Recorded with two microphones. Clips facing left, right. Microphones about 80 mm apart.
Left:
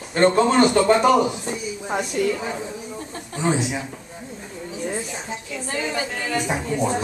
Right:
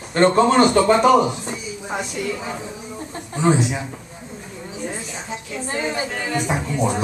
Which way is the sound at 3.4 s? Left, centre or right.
Centre.